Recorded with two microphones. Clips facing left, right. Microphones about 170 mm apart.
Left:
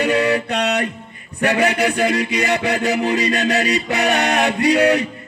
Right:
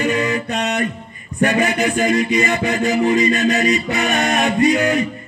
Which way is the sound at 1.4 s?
70° left (ahead or behind).